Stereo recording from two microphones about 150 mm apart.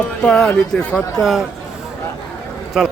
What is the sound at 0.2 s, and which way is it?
Speech, 5° left (ahead or behind).